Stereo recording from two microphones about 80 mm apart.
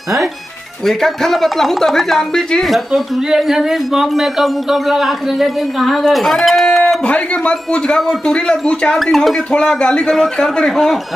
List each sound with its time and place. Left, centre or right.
0.8 s speech: centre
7.1 s a man's voice: centre
8.0 s a man's voice: centre